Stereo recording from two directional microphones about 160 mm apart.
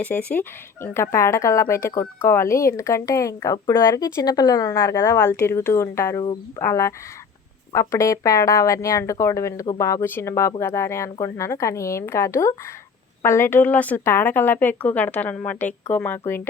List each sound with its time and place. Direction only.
0.0 s speech: 10° left (ahead or behind)